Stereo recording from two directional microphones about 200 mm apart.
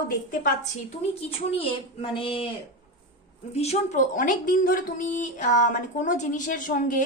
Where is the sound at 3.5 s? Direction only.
30° left (ahead or behind).